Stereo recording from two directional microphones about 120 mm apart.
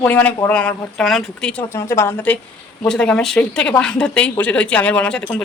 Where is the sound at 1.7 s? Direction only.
20° left (ahead or behind).